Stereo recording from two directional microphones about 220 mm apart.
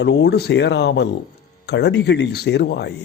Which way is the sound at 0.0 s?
50° left (ahead or behind).